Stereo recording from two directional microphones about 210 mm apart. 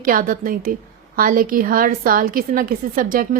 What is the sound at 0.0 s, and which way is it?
A woman's voice, 40° right (ahead or behind).